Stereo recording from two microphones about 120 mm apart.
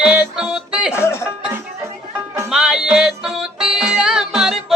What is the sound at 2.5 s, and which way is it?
Music, 5° right (ahead or behind).